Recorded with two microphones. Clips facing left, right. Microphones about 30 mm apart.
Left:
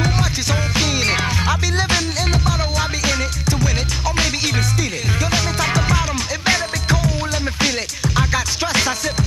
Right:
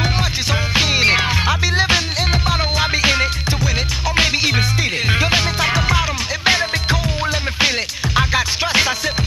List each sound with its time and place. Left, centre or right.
0.0 s music: right